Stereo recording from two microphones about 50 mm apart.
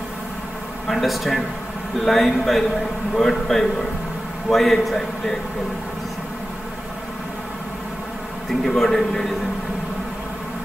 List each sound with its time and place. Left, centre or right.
0.8 s a man's voice: centre
8.6 s a man's voice: centre